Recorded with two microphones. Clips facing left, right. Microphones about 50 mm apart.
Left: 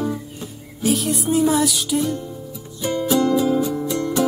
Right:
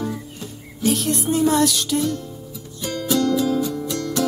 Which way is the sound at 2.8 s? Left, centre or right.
Centre.